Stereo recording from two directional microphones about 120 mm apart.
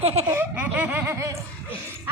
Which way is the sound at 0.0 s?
60° right (ahead or behind).